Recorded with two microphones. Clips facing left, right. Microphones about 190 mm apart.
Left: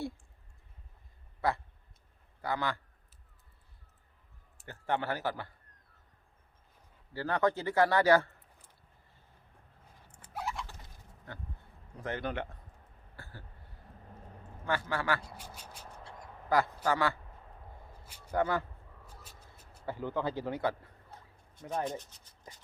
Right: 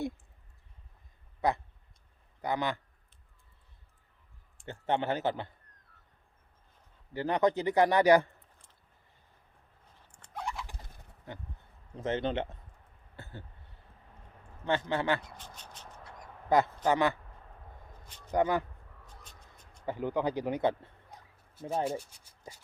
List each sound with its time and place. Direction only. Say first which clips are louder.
1.4 s a man's voice: right 2 dB; 20° right (ahead or behind)
4.6 s a man's voice: right 3 dB; 20° right (ahead or behind)
7.1 s a man's voice: right 2 dB; 20° right (ahead or behind)
10.1 s fowl: even; 5° left (ahead or behind)
11.9 s a man's voice: right 5 dB; 20° right (ahead or behind)
13.1 s a sound: right 4 dB; 20° right (ahead or behind)
14.6 s a man's voice: right 3 dB; 25° right (ahead or behind)
15.4 s a sound: left 1 dB; 10° left (ahead or behind)
16.5 s a man's voice: right 3 dB; 20° right (ahead or behind)
18.3 s speech: right 3 dB; 15° right (ahead or behind)
19.0 s vehicle: even; 5° left (ahead or behind)
19.8 s a man's voice: right 3 dB; 15° right (ahead or behind)
21.8 s speech: right 4 dB; 10° right (ahead or behind)